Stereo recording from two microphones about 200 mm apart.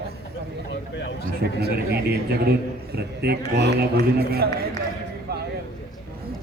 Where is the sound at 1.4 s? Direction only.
55° right (ahead or behind).